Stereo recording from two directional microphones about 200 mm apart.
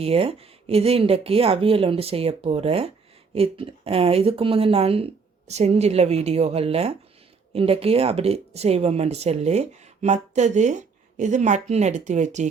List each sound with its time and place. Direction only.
0.0 s speech: 30° right (ahead or behind)